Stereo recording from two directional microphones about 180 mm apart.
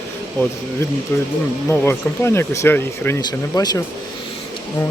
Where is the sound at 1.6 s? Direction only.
10° left (ahead or behind).